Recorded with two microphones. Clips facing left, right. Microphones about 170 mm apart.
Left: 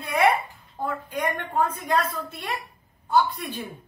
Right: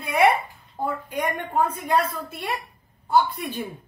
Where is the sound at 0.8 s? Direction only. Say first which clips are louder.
Right 1 dB; 10° right (ahead or behind).